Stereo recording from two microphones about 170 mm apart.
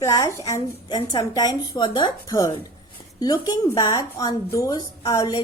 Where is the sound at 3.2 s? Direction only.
20° left (ahead or behind).